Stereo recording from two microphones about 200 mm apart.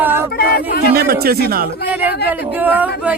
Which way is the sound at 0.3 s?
50° left (ahead or behind).